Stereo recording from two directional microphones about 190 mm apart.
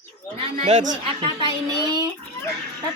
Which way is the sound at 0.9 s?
25° right (ahead or behind).